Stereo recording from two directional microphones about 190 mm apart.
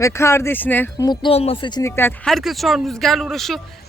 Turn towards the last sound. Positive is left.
turn(degrees=0)  # may be behind; listen again after turning